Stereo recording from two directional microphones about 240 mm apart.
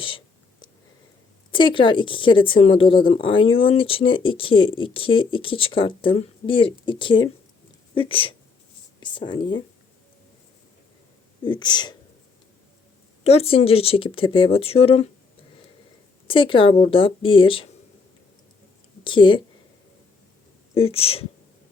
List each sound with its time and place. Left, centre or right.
1.5 s speech: centre
11.4 s speech: centre
13.2 s speech: left
16.2 s speech: left
19.0 s speech: centre
20.7 s speech: left